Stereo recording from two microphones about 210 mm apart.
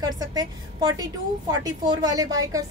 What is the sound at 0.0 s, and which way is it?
A woman's voice, 20° right (ahead or behind).